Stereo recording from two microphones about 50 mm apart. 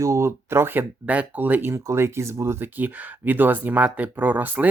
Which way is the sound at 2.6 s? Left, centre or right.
Right.